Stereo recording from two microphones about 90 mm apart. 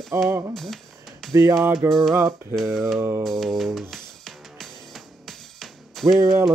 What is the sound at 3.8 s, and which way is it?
Music, centre (ahead or behind).